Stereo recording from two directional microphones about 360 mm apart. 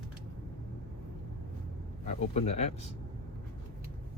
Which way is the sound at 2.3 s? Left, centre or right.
Centre.